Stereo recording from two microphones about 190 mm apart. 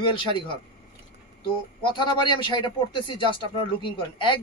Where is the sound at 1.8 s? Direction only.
25° left (ahead or behind).